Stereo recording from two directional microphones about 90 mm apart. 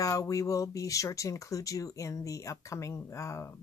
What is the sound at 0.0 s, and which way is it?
Speech, 40° left (ahead or behind).